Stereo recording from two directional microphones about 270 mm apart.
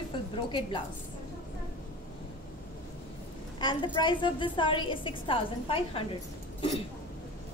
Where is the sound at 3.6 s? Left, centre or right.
Centre.